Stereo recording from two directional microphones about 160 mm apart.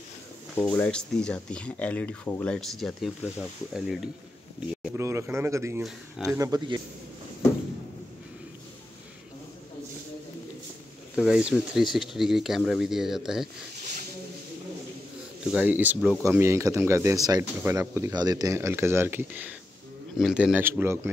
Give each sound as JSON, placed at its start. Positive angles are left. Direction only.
{"t": 0.6, "sound": "speech", "side_deg": 10}
{"t": 4.9, "sound": "speech", "side_deg": -15}
{"t": 5.9, "sound": "speech", "side_deg": 0}
{"t": 6.3, "sound": "speech", "side_deg": -20}
{"t": 11.1, "sound": "speech", "side_deg": -5}
{"t": 15.5, "sound": "speech", "side_deg": -10}